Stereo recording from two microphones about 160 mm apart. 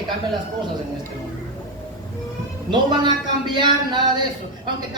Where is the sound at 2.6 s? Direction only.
30° right (ahead or behind).